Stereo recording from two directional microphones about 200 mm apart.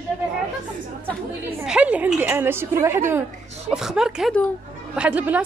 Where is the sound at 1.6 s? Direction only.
5° right (ahead or behind).